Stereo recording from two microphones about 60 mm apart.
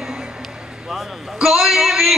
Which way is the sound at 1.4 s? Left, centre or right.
Centre.